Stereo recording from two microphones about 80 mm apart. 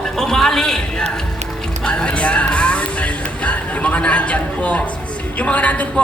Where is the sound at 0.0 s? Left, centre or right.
Centre.